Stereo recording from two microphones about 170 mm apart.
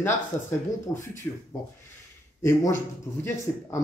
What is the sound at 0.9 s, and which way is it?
Speech, 20° left (ahead or behind).